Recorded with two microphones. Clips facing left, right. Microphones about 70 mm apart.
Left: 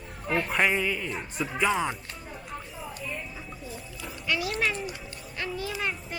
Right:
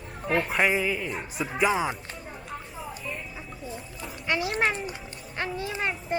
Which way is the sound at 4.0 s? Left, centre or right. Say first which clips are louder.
Right 2 dB; right.